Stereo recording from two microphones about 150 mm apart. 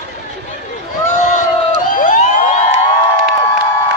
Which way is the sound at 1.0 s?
60° left (ahead or behind).